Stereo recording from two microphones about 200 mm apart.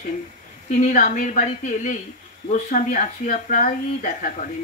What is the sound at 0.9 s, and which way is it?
A woman's voice, 40° left (ahead or behind).